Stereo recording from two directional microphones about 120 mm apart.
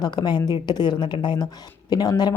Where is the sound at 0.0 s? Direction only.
35° left (ahead or behind).